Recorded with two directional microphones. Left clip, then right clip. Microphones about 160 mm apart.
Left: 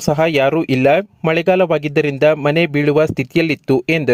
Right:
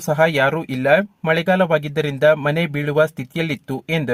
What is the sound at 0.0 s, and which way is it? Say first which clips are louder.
Speech: left 2 dB; 45° left (ahead or behind).